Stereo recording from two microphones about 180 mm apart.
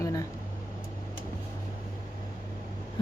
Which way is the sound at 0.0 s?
20° left (ahead or behind).